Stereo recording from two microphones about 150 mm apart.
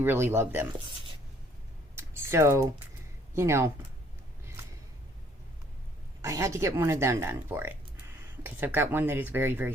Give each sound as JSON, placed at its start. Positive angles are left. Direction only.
{"t": 0.0, "sound": "speech", "side_deg": -15}
{"t": 2.0, "sound": "typing", "side_deg": -15}
{"t": 3.3, "sound": "speech", "side_deg": -20}
{"t": 6.2, "sound": "speech", "side_deg": -20}